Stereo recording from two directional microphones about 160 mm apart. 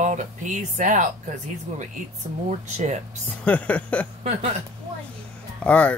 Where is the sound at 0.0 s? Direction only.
50° right (ahead or behind).